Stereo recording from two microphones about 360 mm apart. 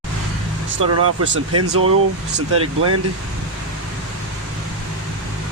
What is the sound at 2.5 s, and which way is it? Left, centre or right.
Speech, right.